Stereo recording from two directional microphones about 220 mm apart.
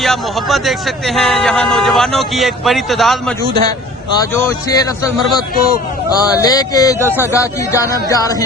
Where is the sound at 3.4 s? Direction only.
45° right (ahead or behind).